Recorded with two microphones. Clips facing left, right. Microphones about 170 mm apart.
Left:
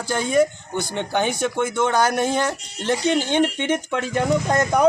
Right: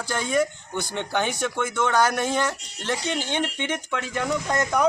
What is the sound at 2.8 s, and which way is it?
Speech, 45° left (ahead or behind).